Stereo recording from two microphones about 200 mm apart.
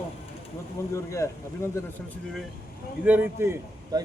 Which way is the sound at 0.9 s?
15° left (ahead or behind).